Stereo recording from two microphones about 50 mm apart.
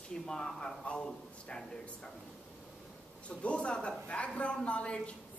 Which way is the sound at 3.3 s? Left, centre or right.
Left.